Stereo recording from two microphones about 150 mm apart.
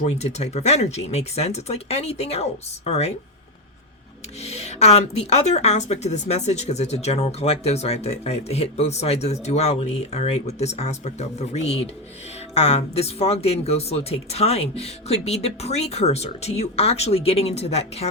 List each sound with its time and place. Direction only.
0.0 s speech: 45° left (ahead or behind)
4.4 s speech: 45° left (ahead or behind)